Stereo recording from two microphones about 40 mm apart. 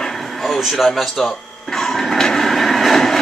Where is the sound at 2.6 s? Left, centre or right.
Centre.